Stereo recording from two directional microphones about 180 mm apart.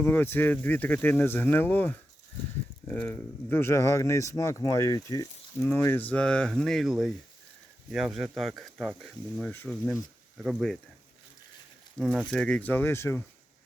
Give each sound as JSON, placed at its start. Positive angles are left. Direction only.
{"t": 0.0, "sound": "speech", "side_deg": 10}
{"t": 11.9, "sound": "speech", "side_deg": 0}